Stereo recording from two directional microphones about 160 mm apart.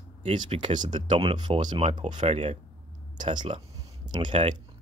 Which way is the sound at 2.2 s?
40° right (ahead or behind).